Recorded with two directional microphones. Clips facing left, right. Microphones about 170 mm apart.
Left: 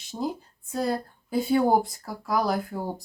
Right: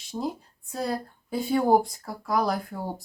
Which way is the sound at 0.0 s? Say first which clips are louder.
Left 1 dB; centre (ahead or behind).